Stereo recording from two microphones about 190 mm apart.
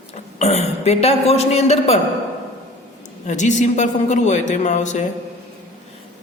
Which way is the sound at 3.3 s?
40° left (ahead or behind).